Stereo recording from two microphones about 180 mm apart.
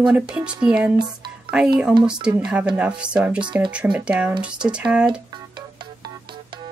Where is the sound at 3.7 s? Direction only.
5° right (ahead or behind).